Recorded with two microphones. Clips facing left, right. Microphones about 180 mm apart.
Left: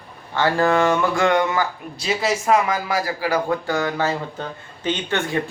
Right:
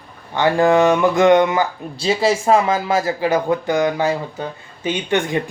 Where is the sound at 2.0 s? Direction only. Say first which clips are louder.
Right 5 dB; 30° right (ahead or behind).